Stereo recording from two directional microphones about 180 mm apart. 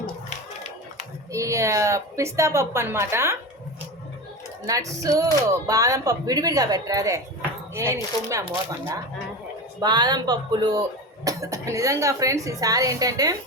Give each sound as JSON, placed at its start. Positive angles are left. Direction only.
{"t": 1.3, "sound": "a woman's voice", "side_deg": -15}
{"t": 4.6, "sound": "speech", "side_deg": -20}
{"t": 9.8, "sound": "speech", "side_deg": -20}